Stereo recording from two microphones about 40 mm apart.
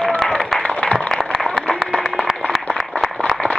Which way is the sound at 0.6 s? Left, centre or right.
Left.